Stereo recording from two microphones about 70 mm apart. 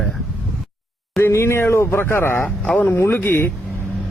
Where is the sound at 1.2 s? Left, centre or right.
Left.